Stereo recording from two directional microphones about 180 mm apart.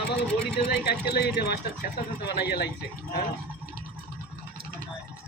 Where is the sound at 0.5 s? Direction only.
65° left (ahead or behind).